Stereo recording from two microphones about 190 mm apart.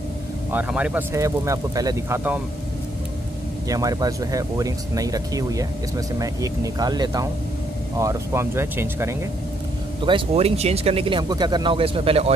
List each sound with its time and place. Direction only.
0.5 s speech: 10° right (ahead or behind)
3.6 s speech: 20° right (ahead or behind)
10.0 s speech: 30° right (ahead or behind)